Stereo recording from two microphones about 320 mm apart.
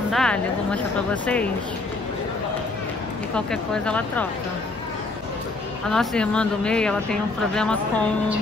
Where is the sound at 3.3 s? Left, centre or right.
Centre.